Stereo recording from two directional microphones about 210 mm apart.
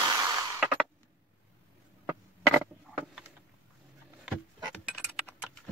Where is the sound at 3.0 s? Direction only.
5° right (ahead or behind).